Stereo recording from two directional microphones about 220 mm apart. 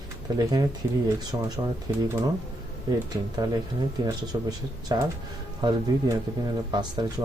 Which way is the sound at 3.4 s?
15° right (ahead or behind).